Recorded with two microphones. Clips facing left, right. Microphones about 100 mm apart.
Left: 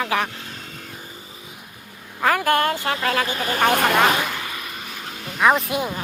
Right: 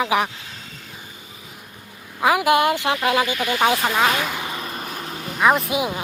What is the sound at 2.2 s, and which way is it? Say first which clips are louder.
Speech: right 2 dB; 10° right (ahead or behind).